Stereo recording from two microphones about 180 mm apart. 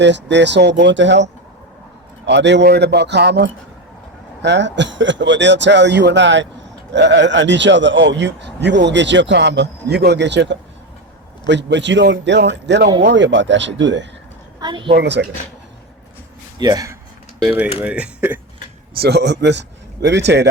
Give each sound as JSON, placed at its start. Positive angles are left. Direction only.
{"t": 0.0, "sound": "speech", "side_deg": -80}
{"t": 14.6, "sound": "a woman's voice", "side_deg": -25}
{"t": 14.9, "sound": "speech", "side_deg": -70}
{"t": 16.6, "sound": "speech", "side_deg": -20}
{"t": 17.8, "sound": "speech", "side_deg": -5}
{"t": 18.9, "sound": "a man's voice", "side_deg": -65}